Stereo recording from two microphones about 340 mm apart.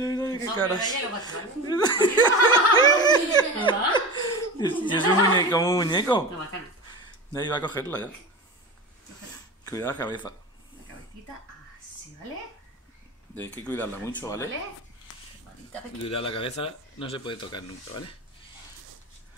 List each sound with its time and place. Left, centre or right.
0.0 s speech: centre
2.5 s laughter: centre
5.5 s speech: centre
7.3 s speech: centre
9.7 s speech: centre
13.3 s speech: centre
16.0 s speech: centre